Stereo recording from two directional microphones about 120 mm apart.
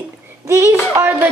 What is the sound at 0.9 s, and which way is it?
Speech, 20° right (ahead or behind).